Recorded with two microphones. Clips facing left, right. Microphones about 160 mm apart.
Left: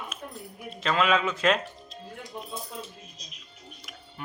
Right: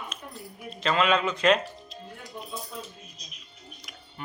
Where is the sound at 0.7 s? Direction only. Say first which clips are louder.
Even; centre (ahead or behind).